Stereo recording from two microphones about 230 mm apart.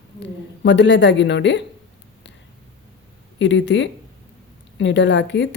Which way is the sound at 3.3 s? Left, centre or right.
Left.